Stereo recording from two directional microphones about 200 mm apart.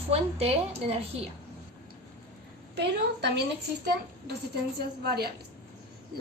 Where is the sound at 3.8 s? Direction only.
50° right (ahead or behind).